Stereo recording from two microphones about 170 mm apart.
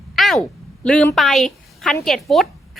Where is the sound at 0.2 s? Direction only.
Centre (ahead or behind).